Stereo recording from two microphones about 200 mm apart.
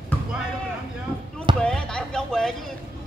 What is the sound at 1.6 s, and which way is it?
Basketball bounce, 5° left (ahead or behind).